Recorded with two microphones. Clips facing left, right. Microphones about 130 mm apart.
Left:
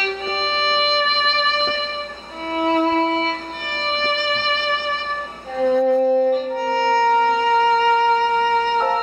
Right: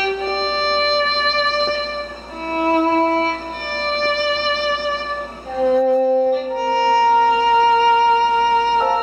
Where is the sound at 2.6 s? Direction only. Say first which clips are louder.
Right 2 dB; 5° right (ahead or behind).